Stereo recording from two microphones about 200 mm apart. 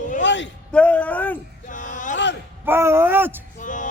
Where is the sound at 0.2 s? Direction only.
65° left (ahead or behind).